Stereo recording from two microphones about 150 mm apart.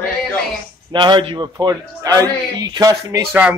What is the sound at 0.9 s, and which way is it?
A man's voice, 30° right (ahead or behind).